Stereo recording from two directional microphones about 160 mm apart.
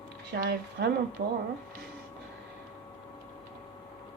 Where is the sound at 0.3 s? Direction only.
65° right (ahead or behind).